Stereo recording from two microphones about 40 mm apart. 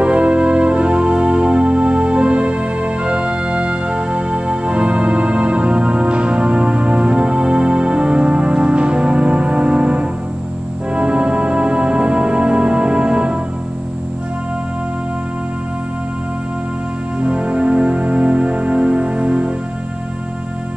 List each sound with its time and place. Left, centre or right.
0.0 s music: right
17.2 s music: right